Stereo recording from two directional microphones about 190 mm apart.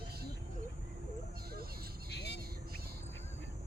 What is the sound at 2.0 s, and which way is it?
Vehicle, 60° left (ahead or behind).